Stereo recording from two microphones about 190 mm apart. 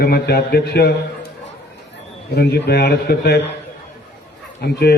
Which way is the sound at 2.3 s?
55° left (ahead or behind).